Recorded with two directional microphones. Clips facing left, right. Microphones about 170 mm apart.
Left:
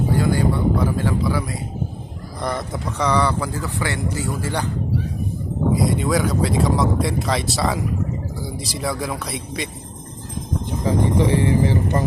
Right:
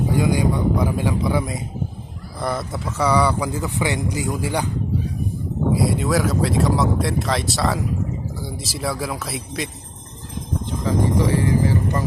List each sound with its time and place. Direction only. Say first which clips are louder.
0.1 s speech: right 1 dB; 15° right (ahead or behind)
2.4 s speech: even; centre (ahead or behind)
5.7 s speech: even; 5° right (ahead or behind)
10.8 s speech: left 1 dB; 20° left (ahead or behind)